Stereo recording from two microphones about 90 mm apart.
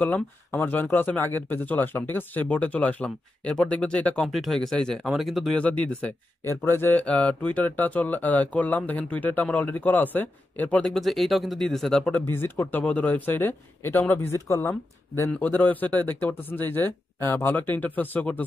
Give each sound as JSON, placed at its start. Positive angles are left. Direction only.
{"t": 0.0, "sound": "speech", "side_deg": 20}
{"t": 4.3, "sound": "speech", "side_deg": 0}
{"t": 5.6, "sound": "speech", "side_deg": 15}
{"t": 6.4, "sound": "speech", "side_deg": 25}
{"t": 10.9, "sound": "speech", "side_deg": 0}
{"t": 12.0, "sound": "speech", "side_deg": 15}
{"t": 15.3, "sound": "speech", "side_deg": 20}